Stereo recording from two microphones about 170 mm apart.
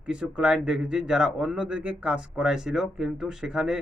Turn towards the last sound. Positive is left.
turn(degrees=-5)  # may be behind; listen again after turning